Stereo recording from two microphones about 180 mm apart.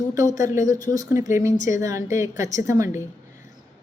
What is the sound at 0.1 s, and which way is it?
A woman's voice, 20° right (ahead or behind).